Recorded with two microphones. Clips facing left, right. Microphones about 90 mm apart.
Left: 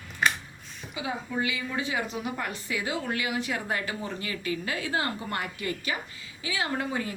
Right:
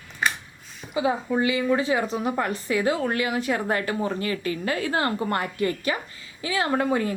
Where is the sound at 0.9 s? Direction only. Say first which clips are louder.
Right 9 dB; 40° right (ahead or behind).